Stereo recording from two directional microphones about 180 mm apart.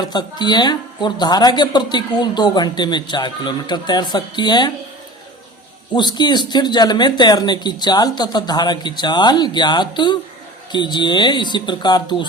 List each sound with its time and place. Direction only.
0.0 s a woman's voice: 25° left (ahead or behind)
5.9 s a woman's voice: 25° left (ahead or behind)